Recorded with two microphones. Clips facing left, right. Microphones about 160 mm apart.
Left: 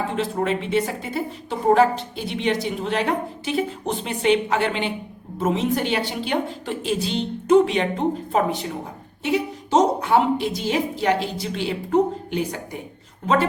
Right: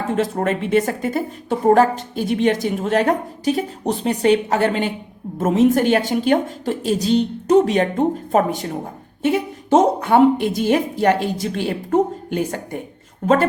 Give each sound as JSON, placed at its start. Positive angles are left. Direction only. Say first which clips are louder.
{"t": 0.1, "sound": "a woman's voice", "louder": "right 3 dB", "side_deg": -45}